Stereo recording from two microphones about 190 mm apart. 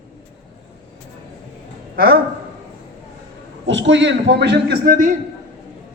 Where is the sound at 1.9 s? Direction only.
55° right (ahead or behind).